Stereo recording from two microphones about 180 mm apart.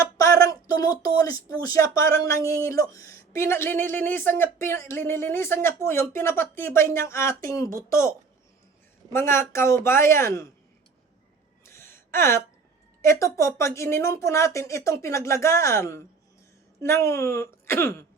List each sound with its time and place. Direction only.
0.2 s a sound: 20° left (ahead or behind)
1.6 s speech: 15° left (ahead or behind)
9.1 s speech: 15° left (ahead or behind)
11.6 s gasp: 15° left (ahead or behind)
13.0 s speech: 15° left (ahead or behind)